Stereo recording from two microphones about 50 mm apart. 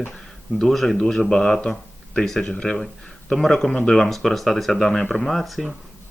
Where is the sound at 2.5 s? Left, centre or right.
Left.